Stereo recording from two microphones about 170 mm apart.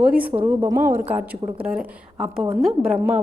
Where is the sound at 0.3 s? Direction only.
10° right (ahead or behind).